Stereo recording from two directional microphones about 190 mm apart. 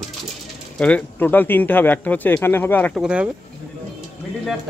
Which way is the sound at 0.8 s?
5° left (ahead or behind).